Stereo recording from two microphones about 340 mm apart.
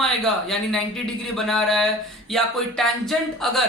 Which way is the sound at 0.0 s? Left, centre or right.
Centre.